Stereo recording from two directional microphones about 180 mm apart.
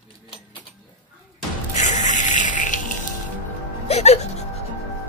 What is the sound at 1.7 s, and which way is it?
Music, 45° left (ahead or behind).